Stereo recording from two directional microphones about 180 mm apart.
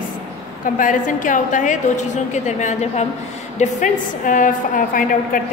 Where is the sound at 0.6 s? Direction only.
45° left (ahead or behind).